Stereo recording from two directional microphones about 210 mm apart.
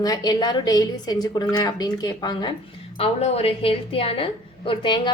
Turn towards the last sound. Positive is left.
turn(degrees=20)  # may be behind; listen again after turning